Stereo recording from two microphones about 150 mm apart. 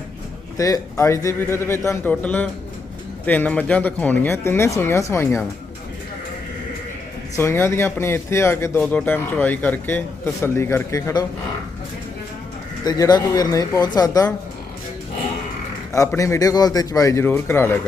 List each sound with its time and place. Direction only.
0.5 s a man's voice: 20° left (ahead or behind)
7.3 s a man's voice: 15° left (ahead or behind)
12.8 s a man's voice: 25° left (ahead or behind)
15.9 s a man's voice: 20° left (ahead or behind)